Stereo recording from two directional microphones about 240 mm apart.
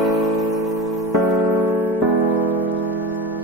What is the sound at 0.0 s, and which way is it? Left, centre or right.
Music, centre.